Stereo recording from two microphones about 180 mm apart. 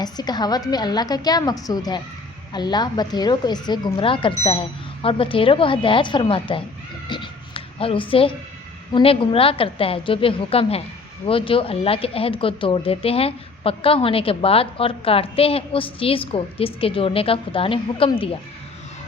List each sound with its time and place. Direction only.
0.0 s speech: 25° left (ahead or behind)
7.1 s writing: 30° left (ahead or behind)
9.0 s speech: 30° left (ahead or behind)